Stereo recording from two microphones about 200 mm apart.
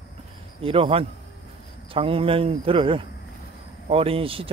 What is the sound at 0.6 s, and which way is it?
Speech, 30° right (ahead or behind).